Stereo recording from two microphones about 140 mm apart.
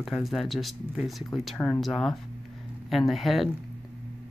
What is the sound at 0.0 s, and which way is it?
Speech, centre (ahead or behind).